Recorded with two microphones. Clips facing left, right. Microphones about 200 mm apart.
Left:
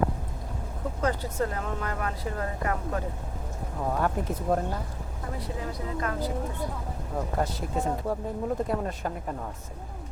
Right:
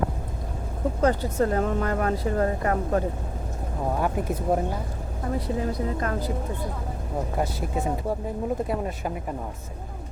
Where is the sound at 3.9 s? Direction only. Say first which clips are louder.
Right 2 dB; 10° right (ahead or behind).